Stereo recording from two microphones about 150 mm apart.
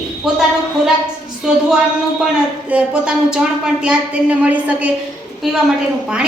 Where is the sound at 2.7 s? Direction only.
5° right (ahead or behind).